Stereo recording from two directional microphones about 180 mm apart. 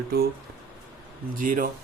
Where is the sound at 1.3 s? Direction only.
50° right (ahead or behind).